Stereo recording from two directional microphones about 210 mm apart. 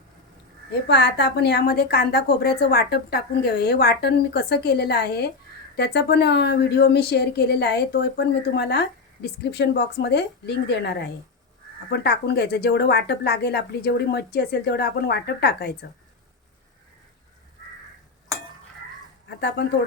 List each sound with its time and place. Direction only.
0.9 s speech: 55° left (ahead or behind)